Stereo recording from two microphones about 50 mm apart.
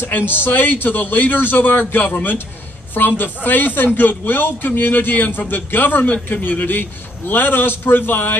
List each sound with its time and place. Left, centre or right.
0.0 s a man's voice: left